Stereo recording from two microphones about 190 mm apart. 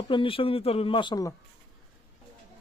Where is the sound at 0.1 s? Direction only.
25° left (ahead or behind).